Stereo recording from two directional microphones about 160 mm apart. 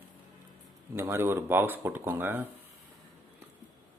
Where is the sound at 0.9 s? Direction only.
15° right (ahead or behind).